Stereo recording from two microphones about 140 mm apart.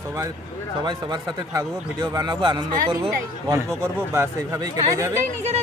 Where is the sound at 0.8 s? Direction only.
30° right (ahead or behind).